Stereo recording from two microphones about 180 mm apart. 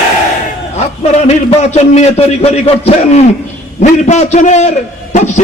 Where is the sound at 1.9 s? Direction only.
35° left (ahead or behind).